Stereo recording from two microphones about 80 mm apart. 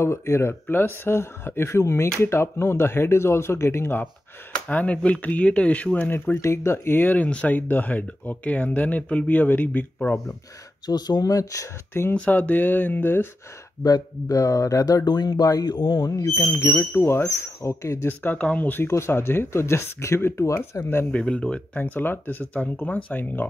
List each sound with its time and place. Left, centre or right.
0.0 s speech: left
4.6 s speech: centre
10.9 s speech: left
11.9 s speech: left
13.8 s speech: left
15.0 s speech: left
16.3 s speech: left
18.9 s speech: left
20.8 s speech: left
21.1 s speech: centre